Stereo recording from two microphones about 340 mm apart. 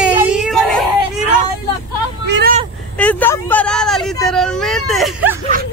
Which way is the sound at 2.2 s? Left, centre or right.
Right.